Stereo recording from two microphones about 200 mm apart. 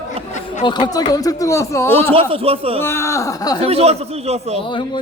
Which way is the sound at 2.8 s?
15° left (ahead or behind).